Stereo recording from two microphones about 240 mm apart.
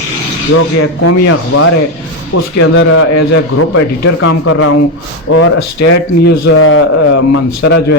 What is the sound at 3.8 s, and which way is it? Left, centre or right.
Speech, left.